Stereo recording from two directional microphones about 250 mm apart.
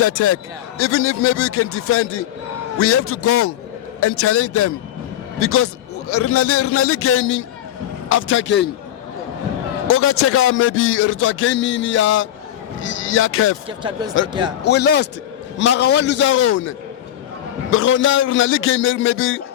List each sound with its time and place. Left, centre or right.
0.0 s a man's voice: left
9.8 s speech: left
13.7 s speech: centre
14.6 s a man's voice: left